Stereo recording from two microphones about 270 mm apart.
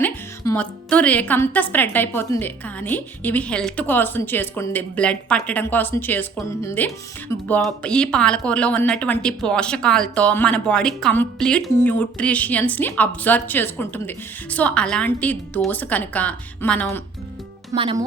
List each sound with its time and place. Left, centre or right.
0.0 s a woman's voice: centre
17.7 s speech: centre